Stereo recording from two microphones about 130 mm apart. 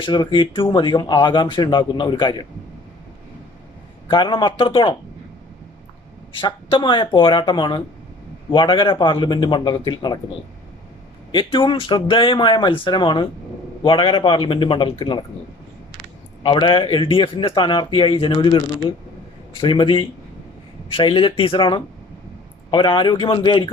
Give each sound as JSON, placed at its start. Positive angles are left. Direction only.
{"t": 0.0, "sound": "a man's voice", "side_deg": 40}
{"t": 4.1, "sound": "a man's voice", "side_deg": 40}
{"t": 6.4, "sound": "a man's voice", "side_deg": 40}
{"t": 11.3, "sound": "a man's voice", "side_deg": 40}
{"t": 16.4, "sound": "a man's voice", "side_deg": 40}